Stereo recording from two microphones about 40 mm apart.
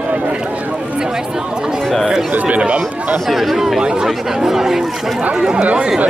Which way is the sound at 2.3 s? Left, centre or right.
Right.